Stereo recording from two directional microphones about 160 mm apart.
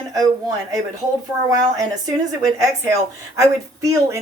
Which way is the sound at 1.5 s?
20° right (ahead or behind).